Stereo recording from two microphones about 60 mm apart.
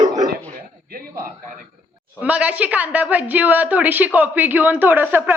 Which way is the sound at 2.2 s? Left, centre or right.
Right.